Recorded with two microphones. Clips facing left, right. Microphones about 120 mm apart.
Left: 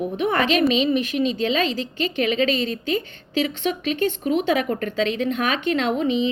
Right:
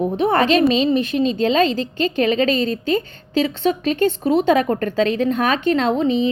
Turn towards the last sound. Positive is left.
turn(degrees=-35)  # may be behind; listen again after turning